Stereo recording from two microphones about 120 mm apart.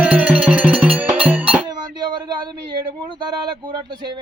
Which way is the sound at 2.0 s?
40° right (ahead or behind).